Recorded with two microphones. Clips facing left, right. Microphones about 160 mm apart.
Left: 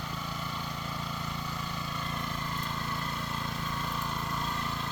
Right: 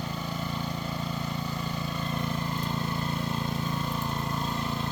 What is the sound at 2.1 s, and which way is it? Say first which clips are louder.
Vehicle: right 5 dB; 25° right (ahead or behind).